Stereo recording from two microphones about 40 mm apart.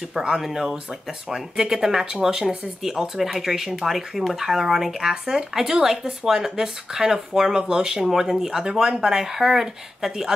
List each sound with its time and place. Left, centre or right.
0.1 s speech: centre